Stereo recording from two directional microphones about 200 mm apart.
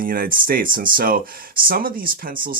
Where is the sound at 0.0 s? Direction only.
45° right (ahead or behind).